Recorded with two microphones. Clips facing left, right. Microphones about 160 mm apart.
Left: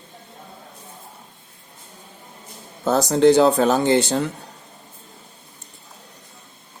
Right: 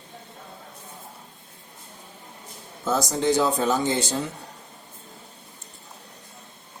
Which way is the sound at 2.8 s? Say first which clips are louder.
Left 8 dB; 65° left (ahead or behind).